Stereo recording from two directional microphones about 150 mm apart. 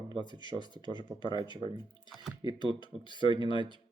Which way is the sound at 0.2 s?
30° left (ahead or behind).